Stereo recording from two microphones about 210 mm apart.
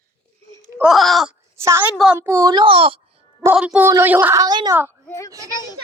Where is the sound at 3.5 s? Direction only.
5° right (ahead or behind).